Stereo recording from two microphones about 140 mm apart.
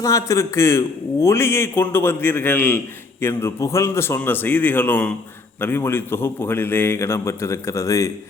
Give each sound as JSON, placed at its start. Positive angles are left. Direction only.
{"t": 0.0, "sound": "a man's voice", "side_deg": 25}